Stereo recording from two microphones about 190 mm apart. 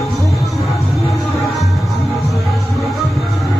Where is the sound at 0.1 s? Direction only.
Centre (ahead or behind).